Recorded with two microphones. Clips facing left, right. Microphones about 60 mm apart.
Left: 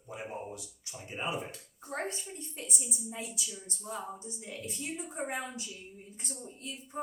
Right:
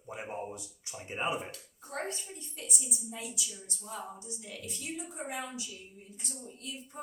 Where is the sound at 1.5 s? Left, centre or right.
Left.